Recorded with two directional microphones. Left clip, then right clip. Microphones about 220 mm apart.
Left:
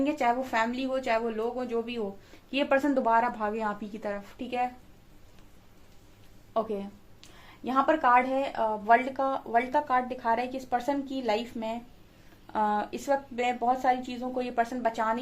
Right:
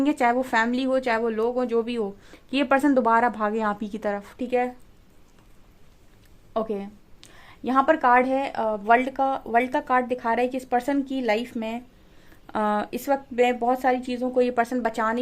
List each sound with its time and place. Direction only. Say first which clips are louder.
0.0 s a woman's voice: right 5 dB; 45° right (ahead or behind)
6.5 s a woman's voice: right 3 dB; 45° right (ahead or behind)